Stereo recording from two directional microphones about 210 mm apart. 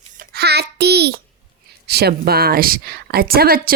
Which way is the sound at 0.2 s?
50° right (ahead or behind).